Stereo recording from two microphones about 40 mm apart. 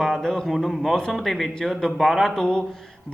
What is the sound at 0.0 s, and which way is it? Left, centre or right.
Speech, centre.